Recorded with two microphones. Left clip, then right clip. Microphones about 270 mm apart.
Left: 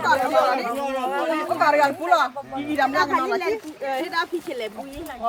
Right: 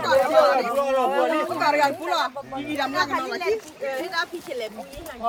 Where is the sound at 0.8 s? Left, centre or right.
Centre.